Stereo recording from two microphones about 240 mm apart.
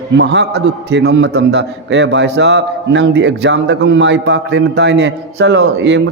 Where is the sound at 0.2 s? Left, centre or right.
Right.